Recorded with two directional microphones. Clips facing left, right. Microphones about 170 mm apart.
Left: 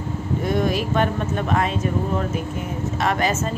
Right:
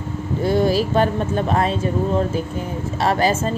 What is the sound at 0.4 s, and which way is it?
A woman's voice, 30° right (ahead or behind).